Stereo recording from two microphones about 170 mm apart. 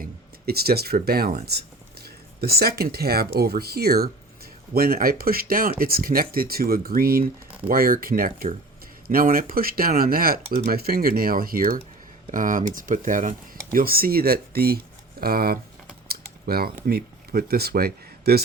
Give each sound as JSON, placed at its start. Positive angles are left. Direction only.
{"t": 0.0, "sound": "speech", "side_deg": -65}
{"t": 1.5, "sound": "a sound", "side_deg": -70}
{"t": 3.3, "sound": "speech", "side_deg": -65}